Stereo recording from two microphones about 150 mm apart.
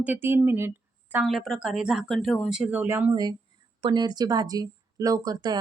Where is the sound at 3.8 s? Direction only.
30° right (ahead or behind).